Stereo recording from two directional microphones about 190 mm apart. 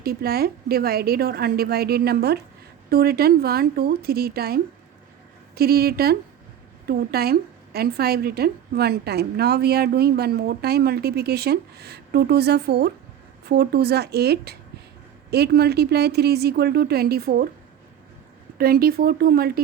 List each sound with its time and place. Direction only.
0.0 s a woman's voice: 55° right (ahead or behind)
18.5 s a woman's voice: 50° right (ahead or behind)